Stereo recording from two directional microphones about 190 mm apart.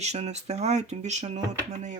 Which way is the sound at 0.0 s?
35° right (ahead or behind).